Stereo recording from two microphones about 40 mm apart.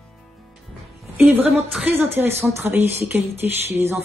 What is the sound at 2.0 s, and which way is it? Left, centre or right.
Speech, right.